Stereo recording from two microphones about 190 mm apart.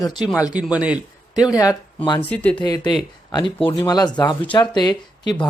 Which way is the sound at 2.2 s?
5° left (ahead or behind).